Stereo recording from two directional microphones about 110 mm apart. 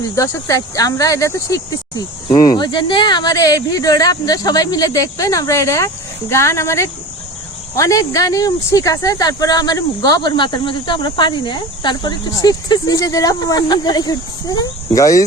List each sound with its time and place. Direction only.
0.2 s speech: 30° left (ahead or behind)
2.3 s speech: 40° left (ahead or behind)